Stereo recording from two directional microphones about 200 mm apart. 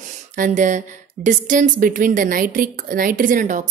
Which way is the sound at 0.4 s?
40° right (ahead or behind).